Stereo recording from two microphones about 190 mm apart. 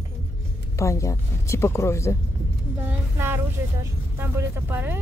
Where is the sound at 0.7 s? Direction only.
15° left (ahead or behind).